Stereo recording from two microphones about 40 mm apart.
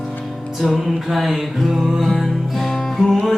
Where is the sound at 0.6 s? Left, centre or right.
Centre.